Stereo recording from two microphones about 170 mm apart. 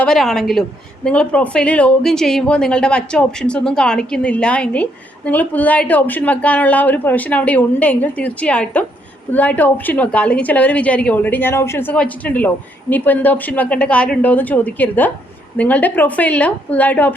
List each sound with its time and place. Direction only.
0.0 s a woman's voice: centre (ahead or behind)